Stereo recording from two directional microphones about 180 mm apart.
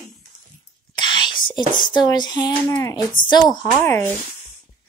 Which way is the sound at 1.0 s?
25° left (ahead or behind).